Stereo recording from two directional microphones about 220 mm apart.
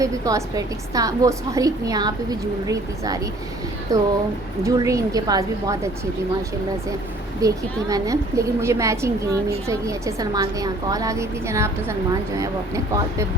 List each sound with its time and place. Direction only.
0.0 s a woman's voice: 15° right (ahead or behind)
7.4 s a woman's voice: 15° right (ahead or behind)